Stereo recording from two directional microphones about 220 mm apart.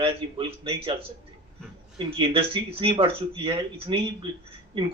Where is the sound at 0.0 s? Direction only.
25° right (ahead or behind).